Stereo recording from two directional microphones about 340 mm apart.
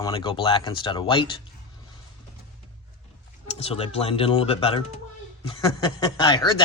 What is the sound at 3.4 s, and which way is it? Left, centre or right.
Speech, centre.